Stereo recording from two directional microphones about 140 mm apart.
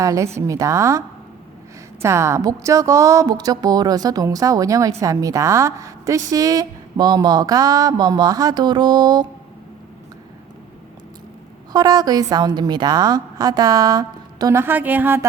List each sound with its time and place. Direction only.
0.0 s speech: 25° right (ahead or behind)
11.7 s speech: 30° right (ahead or behind)
14.6 s a woman's voice: 15° right (ahead or behind)